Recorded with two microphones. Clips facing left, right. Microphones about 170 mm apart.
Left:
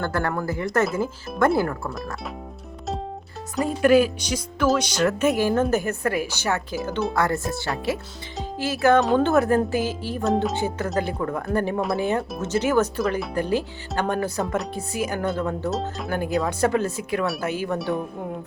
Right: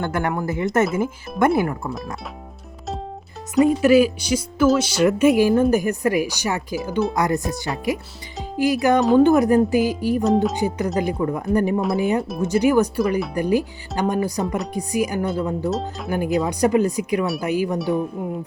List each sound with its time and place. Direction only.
0.0 s speech: 20° right (ahead or behind)
3.5 s speech: centre (ahead or behind)
9.0 s speech: centre (ahead or behind)
9.2 s speech: 15° right (ahead or behind)
10.2 s speech: centre (ahead or behind)
10.5 s speech: 15° right (ahead or behind)
13.0 s speech: centre (ahead or behind)
13.3 s speech: 15° right (ahead or behind)
14.4 s speech: centre (ahead or behind)
14.7 s speech: 15° right (ahead or behind)
15.7 s speech: centre (ahead or behind)
16.0 s speech: 10° right (ahead or behind)
17.7 s speech: centre (ahead or behind)